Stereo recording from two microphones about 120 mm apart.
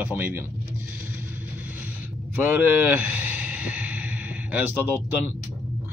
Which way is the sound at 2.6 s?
15° right (ahead or behind).